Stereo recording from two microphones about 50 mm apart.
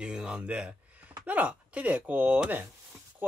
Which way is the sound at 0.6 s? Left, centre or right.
Right.